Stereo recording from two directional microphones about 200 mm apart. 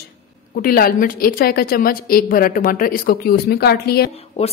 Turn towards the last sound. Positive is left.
turn(degrees=30)  # may be behind; listen again after turning